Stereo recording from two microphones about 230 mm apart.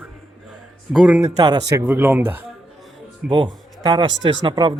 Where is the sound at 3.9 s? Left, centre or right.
Right.